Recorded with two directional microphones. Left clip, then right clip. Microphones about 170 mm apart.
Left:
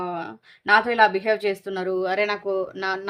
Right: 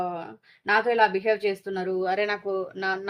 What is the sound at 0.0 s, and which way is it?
Speech, 45° left (ahead or behind).